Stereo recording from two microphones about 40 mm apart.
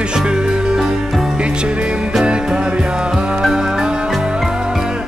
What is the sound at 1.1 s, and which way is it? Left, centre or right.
Music, centre.